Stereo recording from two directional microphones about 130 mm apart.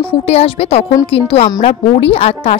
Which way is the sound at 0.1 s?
50° left (ahead or behind).